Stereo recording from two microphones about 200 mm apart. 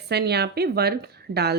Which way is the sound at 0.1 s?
55° right (ahead or behind).